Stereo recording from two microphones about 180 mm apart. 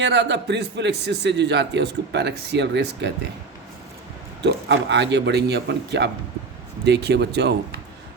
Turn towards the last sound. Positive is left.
turn(degrees=-70)  # may be behind; listen again after turning